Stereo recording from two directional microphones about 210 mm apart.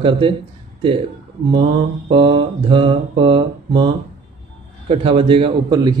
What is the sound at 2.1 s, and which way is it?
A man's voice, 25° right (ahead or behind).